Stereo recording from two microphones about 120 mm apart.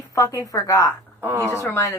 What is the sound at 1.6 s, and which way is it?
Speech, 20° left (ahead or behind).